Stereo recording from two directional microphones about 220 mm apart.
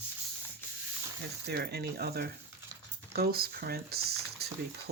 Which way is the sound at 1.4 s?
45° right (ahead or behind).